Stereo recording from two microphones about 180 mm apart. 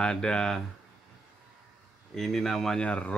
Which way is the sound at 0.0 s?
5° left (ahead or behind).